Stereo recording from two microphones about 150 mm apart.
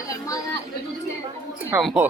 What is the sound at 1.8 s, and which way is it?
Speech, centre (ahead or behind).